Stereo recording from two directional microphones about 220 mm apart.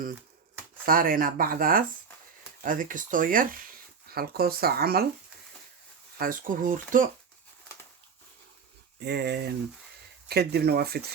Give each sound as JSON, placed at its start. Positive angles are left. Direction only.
{"t": 0.9, "sound": "speech", "side_deg": -40}
{"t": 6.1, "sound": "speech", "side_deg": -40}
{"t": 9.0, "sound": "speech", "side_deg": -50}